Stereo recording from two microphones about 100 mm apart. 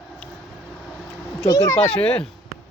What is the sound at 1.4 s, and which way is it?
Speech, 35° left (ahead or behind).